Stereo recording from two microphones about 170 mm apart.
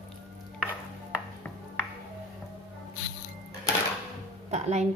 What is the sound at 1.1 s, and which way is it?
Music, 10° left (ahead or behind).